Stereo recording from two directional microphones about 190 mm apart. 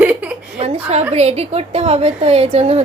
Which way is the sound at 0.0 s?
10° right (ahead or behind).